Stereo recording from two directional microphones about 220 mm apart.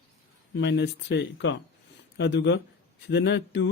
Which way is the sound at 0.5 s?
50° left (ahead or behind).